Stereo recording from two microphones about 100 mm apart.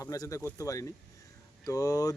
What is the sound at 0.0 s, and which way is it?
Speech, 35° left (ahead or behind).